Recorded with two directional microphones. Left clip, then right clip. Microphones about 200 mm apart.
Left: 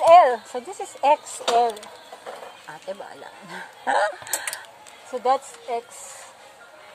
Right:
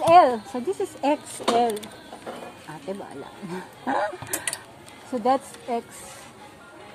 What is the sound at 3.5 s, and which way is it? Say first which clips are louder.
Speech: left 4 dB; 25° left (ahead or behind).